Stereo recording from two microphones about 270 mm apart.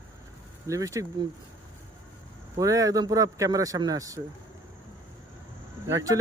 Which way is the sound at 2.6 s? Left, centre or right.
Centre.